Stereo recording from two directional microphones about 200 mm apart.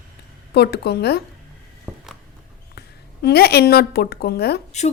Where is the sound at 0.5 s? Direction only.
55° left (ahead or behind).